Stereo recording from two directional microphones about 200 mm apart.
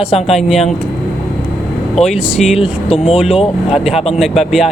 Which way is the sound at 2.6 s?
30° left (ahead or behind).